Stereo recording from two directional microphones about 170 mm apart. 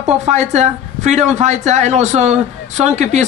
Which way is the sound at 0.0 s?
40° right (ahead or behind).